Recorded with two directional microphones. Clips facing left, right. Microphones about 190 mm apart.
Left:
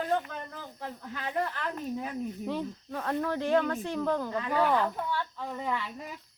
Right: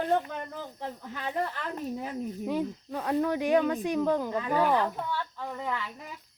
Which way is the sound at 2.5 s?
15° right (ahead or behind).